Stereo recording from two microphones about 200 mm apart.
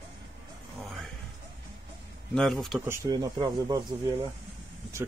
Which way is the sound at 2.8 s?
15° right (ahead or behind).